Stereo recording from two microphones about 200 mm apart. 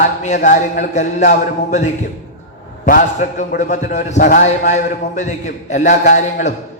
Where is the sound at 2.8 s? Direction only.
40° left (ahead or behind).